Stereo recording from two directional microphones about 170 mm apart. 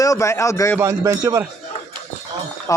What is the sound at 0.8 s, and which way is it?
Speech, 20° right (ahead or behind).